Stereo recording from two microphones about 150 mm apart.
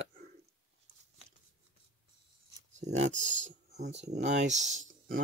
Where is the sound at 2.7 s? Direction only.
50° right (ahead or behind).